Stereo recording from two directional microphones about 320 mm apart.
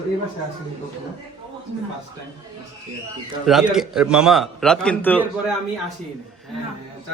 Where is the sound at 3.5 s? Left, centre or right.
Centre.